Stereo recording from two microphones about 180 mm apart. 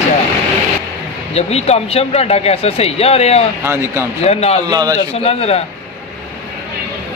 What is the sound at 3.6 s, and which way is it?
Speech, 15° right (ahead or behind).